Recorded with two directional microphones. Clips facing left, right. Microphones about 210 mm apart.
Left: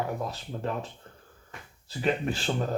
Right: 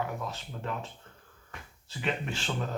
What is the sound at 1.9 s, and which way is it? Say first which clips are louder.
Speech: left 6 dB; 40° left (ahead or behind).